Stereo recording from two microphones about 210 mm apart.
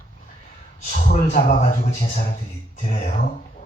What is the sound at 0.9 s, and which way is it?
Speech, 40° left (ahead or behind).